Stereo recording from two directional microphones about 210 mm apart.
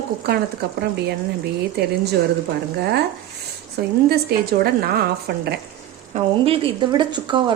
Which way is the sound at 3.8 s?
50° right (ahead or behind).